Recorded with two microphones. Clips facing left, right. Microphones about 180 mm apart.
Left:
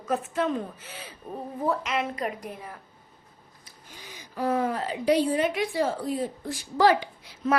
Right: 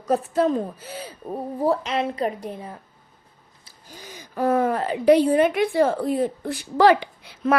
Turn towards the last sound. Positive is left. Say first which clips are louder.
# right 5 dB
turn(degrees=-65)  # may be behind; listen again after turning